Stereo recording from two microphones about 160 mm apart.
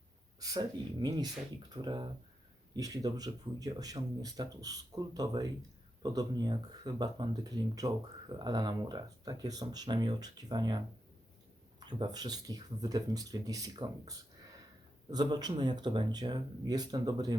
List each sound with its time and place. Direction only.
0.3 s speech: 25° right (ahead or behind)
11.9 s speech: 25° right (ahead or behind)